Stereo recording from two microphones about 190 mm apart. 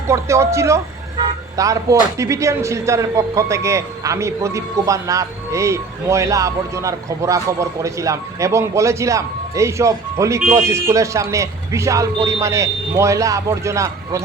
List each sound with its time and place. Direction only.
0.1 s speech: 15° right (ahead or behind)